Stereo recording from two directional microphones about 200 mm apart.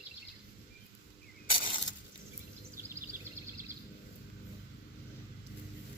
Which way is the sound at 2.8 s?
10° right (ahead or behind).